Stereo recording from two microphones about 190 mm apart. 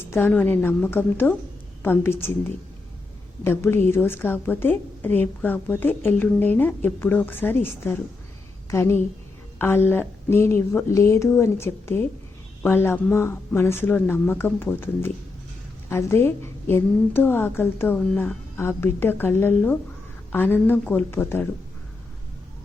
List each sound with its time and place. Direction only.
0.0 s a woman's voice: 10° left (ahead or behind)
3.4 s a woman's voice: 10° left (ahead or behind)